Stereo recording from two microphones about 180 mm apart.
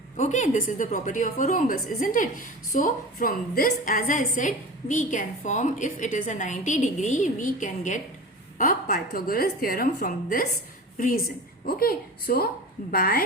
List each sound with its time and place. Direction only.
0.2 s a woman's voice: 40° left (ahead or behind)